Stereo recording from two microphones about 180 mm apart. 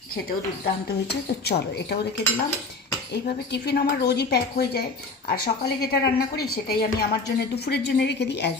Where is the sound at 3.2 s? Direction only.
60° left (ahead or behind).